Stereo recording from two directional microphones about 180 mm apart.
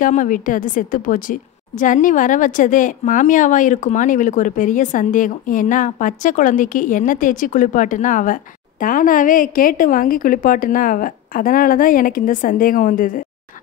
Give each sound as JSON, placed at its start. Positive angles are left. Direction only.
{"t": 0.0, "sound": "a woman's voice", "side_deg": 45}